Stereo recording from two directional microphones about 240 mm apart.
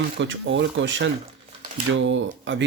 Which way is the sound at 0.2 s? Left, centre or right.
Right.